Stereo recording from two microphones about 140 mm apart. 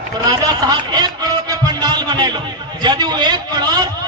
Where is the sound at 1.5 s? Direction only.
30° right (ahead or behind).